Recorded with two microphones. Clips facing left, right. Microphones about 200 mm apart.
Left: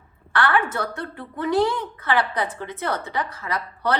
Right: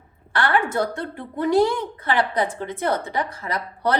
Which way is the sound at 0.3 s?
25° right (ahead or behind).